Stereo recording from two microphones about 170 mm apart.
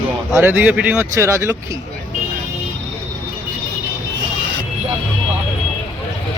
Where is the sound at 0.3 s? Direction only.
10° right (ahead or behind).